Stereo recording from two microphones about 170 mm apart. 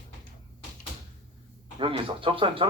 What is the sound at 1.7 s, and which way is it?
Speech, 30° right (ahead or behind).